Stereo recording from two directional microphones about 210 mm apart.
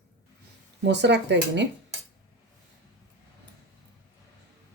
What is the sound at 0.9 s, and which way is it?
Speech, 55° right (ahead or behind).